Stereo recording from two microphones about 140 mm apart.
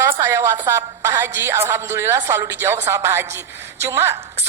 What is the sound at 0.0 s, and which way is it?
A woman's voice, 20° right (ahead or behind).